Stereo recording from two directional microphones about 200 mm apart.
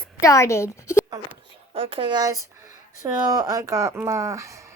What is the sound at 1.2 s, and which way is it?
Speech, 60° right (ahead or behind).